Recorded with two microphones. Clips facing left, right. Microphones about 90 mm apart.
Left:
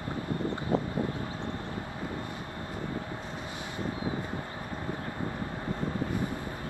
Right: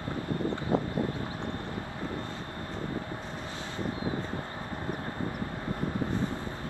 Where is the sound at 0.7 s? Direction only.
20° right (ahead or behind).